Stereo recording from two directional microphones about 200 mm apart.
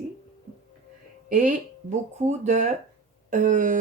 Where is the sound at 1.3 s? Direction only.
40° right (ahead or behind).